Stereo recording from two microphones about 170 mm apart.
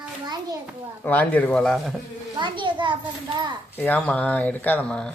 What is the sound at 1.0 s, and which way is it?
Speech, 10° left (ahead or behind).